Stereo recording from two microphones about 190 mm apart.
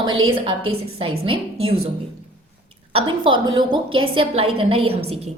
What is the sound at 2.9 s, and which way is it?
A woman's voice, 30° right (ahead or behind).